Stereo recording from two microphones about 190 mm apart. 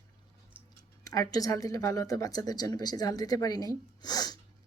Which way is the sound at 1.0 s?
20° left (ahead or behind).